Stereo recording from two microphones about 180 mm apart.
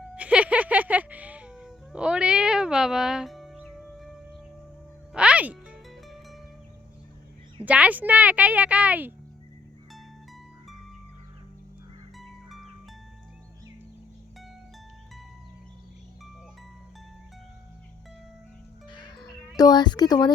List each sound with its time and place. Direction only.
0.0 s a sound: 5° right (ahead or behind)
5.1 s music: 5° right (ahead or behind)
7.6 s speech: 10° right (ahead or behind)
12.1 s music: centre (ahead or behind)
18.9 s music: 25° left (ahead or behind)